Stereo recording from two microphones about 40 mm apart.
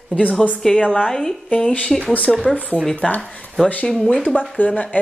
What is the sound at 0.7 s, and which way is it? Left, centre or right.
Speech, left.